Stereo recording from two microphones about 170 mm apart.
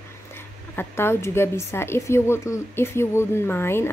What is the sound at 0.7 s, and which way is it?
A woman's voice, 15° left (ahead or behind).